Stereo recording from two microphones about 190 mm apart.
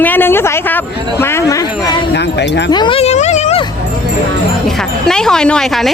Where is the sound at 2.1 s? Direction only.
65° left (ahead or behind).